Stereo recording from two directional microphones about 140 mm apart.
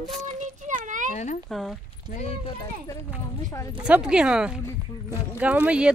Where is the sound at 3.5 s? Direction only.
25° left (ahead or behind).